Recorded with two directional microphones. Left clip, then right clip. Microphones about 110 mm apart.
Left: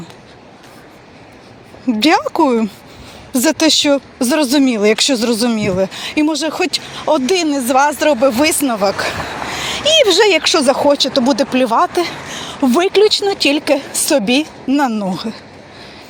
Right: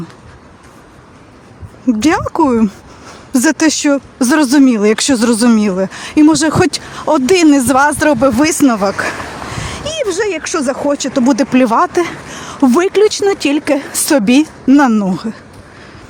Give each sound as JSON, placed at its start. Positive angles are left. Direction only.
{"t": 2.0, "sound": "speech", "side_deg": -45}
{"t": 4.2, "sound": "speech", "side_deg": -90}
{"t": 4.7, "sound": "speech", "side_deg": -55}
{"t": 4.9, "sound": "speech", "side_deg": -90}
{"t": 5.5, "sound": "speech", "side_deg": -55}
{"t": 6.4, "sound": "speech", "side_deg": -90}
{"t": 7.8, "sound": "speech", "side_deg": -50}
{"t": 9.6, "sound": "a sound", "side_deg": -30}
{"t": 9.9, "sound": "speech", "side_deg": -10}
{"t": 10.4, "sound": "speech", "side_deg": -20}
{"t": 11.2, "sound": "a woman's voice", "side_deg": -70}
{"t": 13.2, "sound": "speech", "side_deg": -55}
{"t": 13.7, "sound": "a woman's voice", "side_deg": -90}